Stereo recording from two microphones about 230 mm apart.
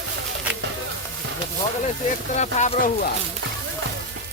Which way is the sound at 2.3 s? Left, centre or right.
Left.